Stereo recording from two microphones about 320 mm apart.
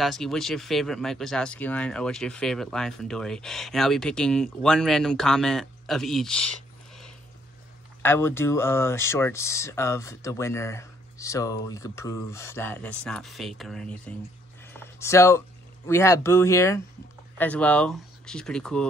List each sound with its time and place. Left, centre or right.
0.0 s speech: centre
8.0 s speech: centre
14.7 s a sound: centre
15.9 s speech: centre